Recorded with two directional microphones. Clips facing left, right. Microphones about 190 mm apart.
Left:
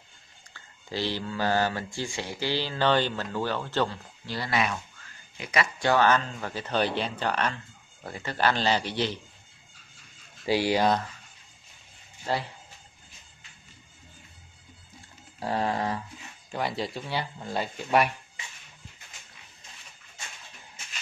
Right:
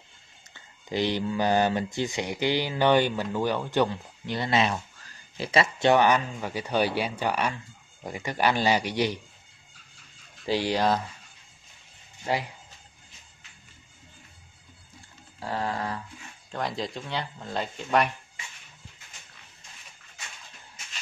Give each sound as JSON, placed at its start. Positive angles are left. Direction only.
{"t": 0.5, "sound": "speech", "side_deg": -20}
{"t": 10.4, "sound": "speech", "side_deg": 5}
{"t": 12.3, "sound": "speech", "side_deg": -15}
{"t": 15.4, "sound": "a sound", "side_deg": 20}
{"t": 16.5, "sound": "speech", "side_deg": 5}